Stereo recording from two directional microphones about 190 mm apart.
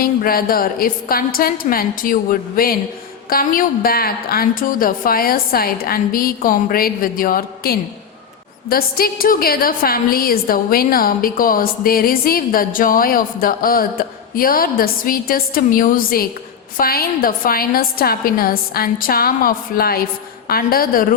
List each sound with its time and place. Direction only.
0.0 s a woman's voice: 50° left (ahead or behind)